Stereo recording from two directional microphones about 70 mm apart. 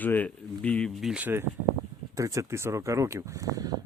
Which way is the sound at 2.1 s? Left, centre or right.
Right.